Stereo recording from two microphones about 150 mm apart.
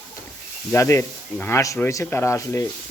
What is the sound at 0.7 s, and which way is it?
Speech, 20° left (ahead or behind).